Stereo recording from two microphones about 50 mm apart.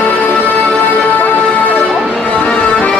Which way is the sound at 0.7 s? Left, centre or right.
Left.